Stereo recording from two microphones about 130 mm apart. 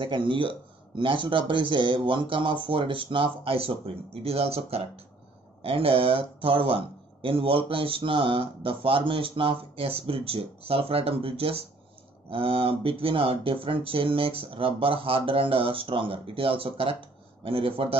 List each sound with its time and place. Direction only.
0.0 s speech: 40° right (ahead or behind)